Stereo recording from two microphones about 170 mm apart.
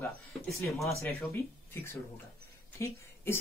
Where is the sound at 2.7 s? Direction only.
15° left (ahead or behind).